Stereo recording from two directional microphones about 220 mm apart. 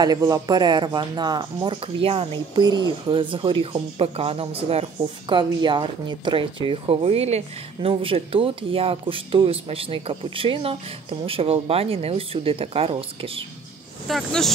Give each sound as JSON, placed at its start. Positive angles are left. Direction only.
{"t": 0.0, "sound": "speech", "side_deg": -15}
{"t": 14.0, "sound": "speech", "side_deg": 0}